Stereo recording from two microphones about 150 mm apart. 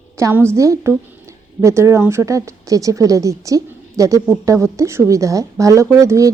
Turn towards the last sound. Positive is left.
turn(degrees=-20)  # may be behind; listen again after turning